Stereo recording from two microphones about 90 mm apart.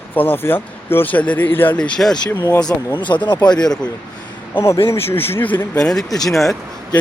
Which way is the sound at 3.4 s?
50° left (ahead or behind).